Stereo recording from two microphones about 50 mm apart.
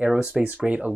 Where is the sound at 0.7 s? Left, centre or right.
Right.